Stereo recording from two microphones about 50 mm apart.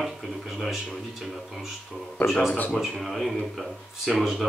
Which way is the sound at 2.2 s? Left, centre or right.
Left.